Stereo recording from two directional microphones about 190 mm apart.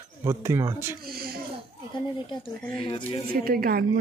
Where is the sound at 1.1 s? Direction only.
50° right (ahead or behind).